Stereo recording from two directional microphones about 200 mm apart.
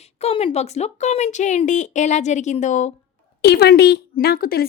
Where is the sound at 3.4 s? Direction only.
55° left (ahead or behind).